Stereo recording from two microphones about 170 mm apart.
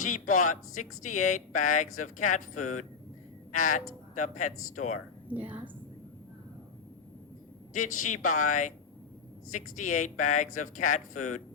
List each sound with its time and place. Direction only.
0.0 s speech: 50° left (ahead or behind)
5.3 s a woman's voice: 10° right (ahead or behind)
7.8 s speech: 50° left (ahead or behind)